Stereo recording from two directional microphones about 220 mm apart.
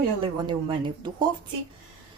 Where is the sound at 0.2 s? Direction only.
20° right (ahead or behind).